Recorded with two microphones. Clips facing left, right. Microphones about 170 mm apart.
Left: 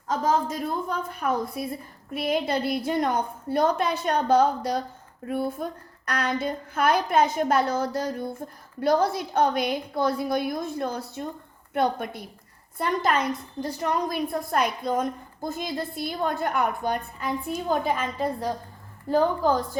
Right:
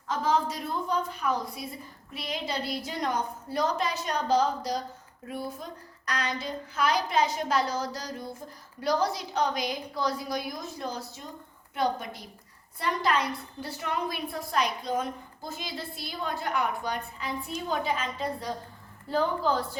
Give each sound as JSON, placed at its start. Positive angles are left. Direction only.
{"t": 0.1, "sound": "a woman's voice", "side_deg": 45}